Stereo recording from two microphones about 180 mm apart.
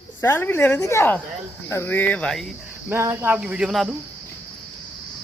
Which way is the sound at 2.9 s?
15° right (ahead or behind).